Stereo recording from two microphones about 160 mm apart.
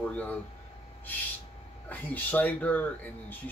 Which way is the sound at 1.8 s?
10° left (ahead or behind).